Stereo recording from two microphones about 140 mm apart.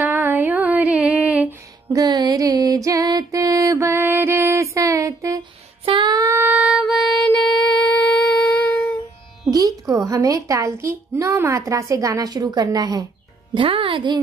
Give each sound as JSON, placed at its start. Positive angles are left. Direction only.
{"t": 0.0, "sound": "music", "side_deg": -15}
{"t": 1.9, "sound": "music", "side_deg": -30}
{"t": 5.9, "sound": "child singing", "side_deg": -30}
{"t": 7.2, "sound": "humming", "side_deg": 10}
{"t": 9.5, "sound": "a sound", "side_deg": -25}
{"t": 11.1, "sound": "a woman's voice", "side_deg": -20}
{"t": 13.6, "sound": "speech", "side_deg": -40}